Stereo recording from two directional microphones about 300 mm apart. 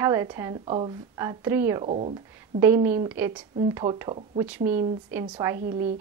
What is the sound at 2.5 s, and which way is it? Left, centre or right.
Speech, centre.